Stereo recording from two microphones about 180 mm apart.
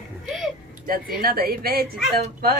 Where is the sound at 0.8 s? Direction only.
55° right (ahead or behind).